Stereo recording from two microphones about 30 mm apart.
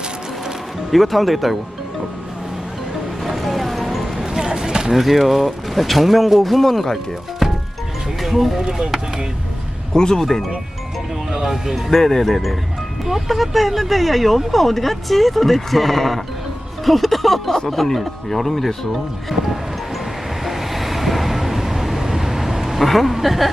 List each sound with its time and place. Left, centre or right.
0.9 s speech: centre
3.2 s music: centre
4.3 s a sound: centre
4.9 s speech: centre
9.9 s speech: centre
11.3 s speech: centre
11.9 s speech: centre
12.2 s speech: centre
19.3 s speech: centre
20.4 s vehicle: centre
22.9 s a woman's voice: centre